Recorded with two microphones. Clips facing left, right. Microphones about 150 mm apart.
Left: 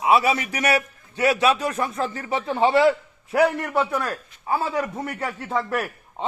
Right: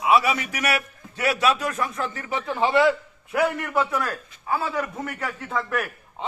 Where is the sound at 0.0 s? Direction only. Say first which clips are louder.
Left 1 dB; 30° left (ahead or behind).